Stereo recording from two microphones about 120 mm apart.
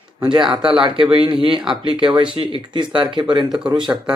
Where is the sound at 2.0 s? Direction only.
45° right (ahead or behind).